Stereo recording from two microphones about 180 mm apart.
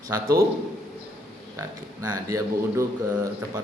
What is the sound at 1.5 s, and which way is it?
A man's voice, 20° right (ahead or behind).